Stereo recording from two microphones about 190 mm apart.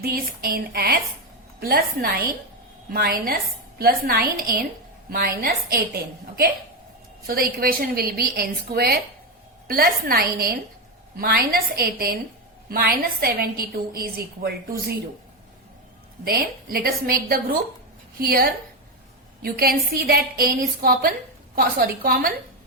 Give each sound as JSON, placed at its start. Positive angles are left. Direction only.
{"t": 0.0, "sound": "a woman's voice", "side_deg": -50}
{"t": 7.3, "sound": "a woman's voice", "side_deg": -50}
{"t": 16.2, "sound": "a woman's voice", "side_deg": -55}